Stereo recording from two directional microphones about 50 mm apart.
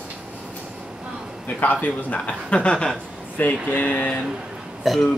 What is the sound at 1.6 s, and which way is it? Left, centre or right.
Speech, left.